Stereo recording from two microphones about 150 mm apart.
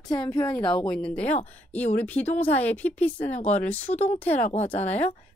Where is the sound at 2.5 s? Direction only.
10° left (ahead or behind).